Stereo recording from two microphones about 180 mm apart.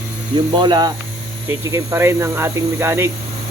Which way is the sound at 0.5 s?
25° right (ahead or behind).